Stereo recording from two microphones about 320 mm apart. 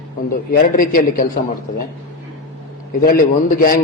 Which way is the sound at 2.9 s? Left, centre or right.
Left.